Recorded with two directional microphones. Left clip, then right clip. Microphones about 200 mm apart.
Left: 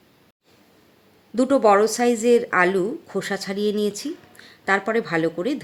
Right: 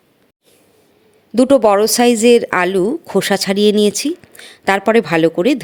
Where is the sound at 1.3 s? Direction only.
40° right (ahead or behind).